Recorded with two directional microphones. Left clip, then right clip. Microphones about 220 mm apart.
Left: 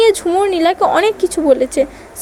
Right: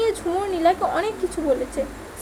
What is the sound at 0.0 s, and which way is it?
Speech, 40° left (ahead or behind).